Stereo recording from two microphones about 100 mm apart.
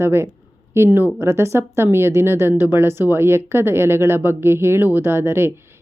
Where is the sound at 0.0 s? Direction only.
25° right (ahead or behind).